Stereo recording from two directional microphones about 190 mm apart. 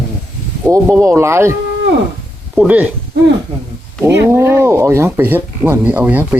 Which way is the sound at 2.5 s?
10° right (ahead or behind).